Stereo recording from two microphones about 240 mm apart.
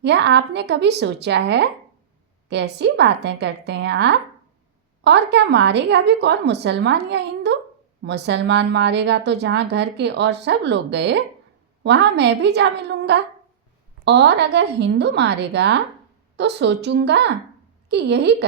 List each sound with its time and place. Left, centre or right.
0.0 s a woman's voice: right